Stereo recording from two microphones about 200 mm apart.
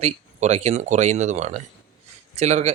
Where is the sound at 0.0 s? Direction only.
35° right (ahead or behind).